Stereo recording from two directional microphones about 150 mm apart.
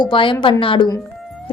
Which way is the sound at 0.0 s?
35° left (ahead or behind).